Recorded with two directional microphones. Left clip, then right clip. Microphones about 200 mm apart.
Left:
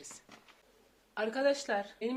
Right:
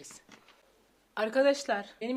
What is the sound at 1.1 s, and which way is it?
Speech, 55° right (ahead or behind).